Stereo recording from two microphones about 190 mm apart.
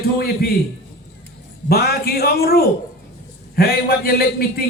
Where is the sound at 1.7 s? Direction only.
55° left (ahead or behind).